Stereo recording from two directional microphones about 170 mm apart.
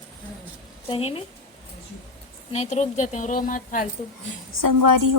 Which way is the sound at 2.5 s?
40° left (ahead or behind).